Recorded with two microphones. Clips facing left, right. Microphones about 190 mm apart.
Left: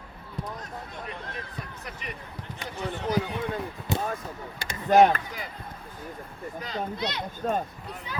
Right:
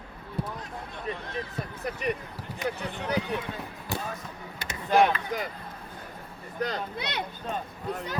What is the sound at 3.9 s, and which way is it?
Basketball bounce, 20° left (ahead or behind).